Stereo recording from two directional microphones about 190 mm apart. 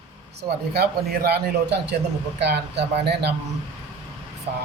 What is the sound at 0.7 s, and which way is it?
A man's voice, 55° right (ahead or behind).